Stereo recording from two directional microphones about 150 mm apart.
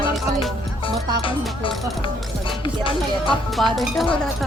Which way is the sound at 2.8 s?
35° left (ahead or behind).